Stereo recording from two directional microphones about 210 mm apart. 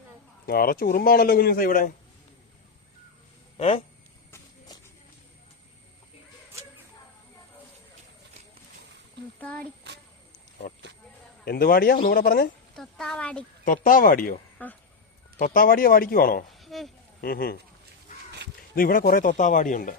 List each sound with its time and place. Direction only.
0.4 s speech: 45° left (ahead or behind)
3.6 s speech: 30° left (ahead or behind)
9.4 s speech: 5° left (ahead or behind)
11.4 s speech: 45° left (ahead or behind)
12.7 s speech: centre (ahead or behind)
13.7 s speech: 40° left (ahead or behind)
14.6 s speech: 10° left (ahead or behind)
15.4 s speech: 45° left (ahead or behind)
16.6 s a sound: centre (ahead or behind)
17.2 s speech: 45° left (ahead or behind)
18.7 s speech: 45° left (ahead or behind)